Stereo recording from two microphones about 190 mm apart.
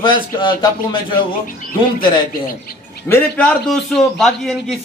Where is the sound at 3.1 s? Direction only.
10° left (ahead or behind).